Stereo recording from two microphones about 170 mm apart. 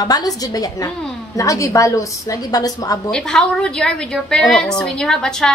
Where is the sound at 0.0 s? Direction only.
20° left (ahead or behind).